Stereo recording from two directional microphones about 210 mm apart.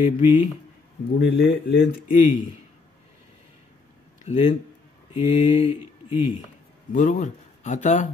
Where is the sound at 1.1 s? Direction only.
50° left (ahead or behind).